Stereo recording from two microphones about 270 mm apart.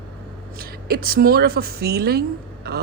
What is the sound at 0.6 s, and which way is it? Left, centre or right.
A woman's voice, right.